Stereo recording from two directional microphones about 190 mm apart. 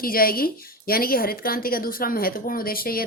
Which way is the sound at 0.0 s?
50° left (ahead or behind).